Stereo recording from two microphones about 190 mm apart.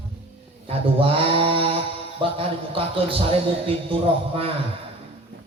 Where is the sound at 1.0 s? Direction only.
30° right (ahead or behind).